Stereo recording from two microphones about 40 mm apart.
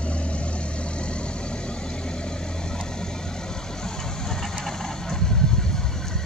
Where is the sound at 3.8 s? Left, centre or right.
Centre.